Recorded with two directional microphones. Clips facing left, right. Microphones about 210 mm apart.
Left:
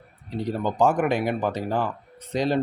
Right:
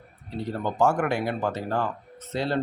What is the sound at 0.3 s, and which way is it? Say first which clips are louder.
Speech: left 2 dB; 15° left (ahead or behind).